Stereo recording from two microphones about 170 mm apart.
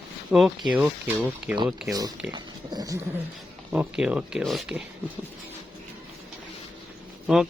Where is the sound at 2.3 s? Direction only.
25° right (ahead or behind).